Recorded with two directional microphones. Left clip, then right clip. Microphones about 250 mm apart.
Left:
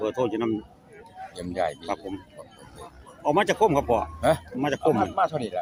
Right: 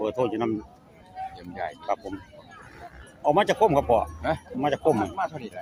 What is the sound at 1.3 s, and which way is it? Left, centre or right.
Speech, left.